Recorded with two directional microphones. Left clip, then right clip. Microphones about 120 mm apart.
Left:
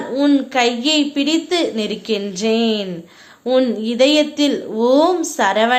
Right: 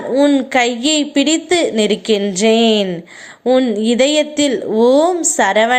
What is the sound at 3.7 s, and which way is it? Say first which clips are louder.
A woman's voice: right 1 dB; 40° right (ahead or behind).